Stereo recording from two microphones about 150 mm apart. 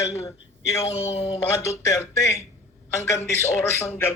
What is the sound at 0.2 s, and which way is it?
Speech, 20° left (ahead or behind).